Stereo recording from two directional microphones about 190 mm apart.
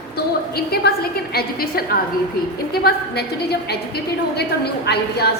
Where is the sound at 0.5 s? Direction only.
55° left (ahead or behind).